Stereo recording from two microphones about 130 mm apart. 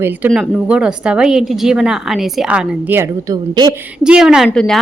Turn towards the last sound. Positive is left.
turn(degrees=-5)  # may be behind; listen again after turning